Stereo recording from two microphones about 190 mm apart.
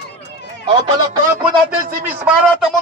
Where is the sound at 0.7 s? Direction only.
20° right (ahead or behind).